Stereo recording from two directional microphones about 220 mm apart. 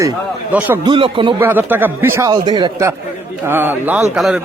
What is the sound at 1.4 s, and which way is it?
A man's voice, 10° right (ahead or behind).